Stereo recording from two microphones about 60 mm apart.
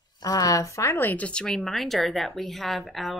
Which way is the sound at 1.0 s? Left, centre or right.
Left.